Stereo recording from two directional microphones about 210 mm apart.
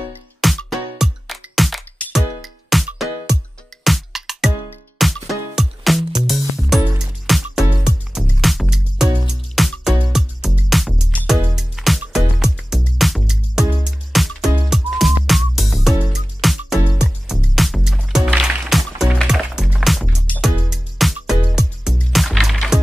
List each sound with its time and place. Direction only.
0.4 s music: centre (ahead or behind)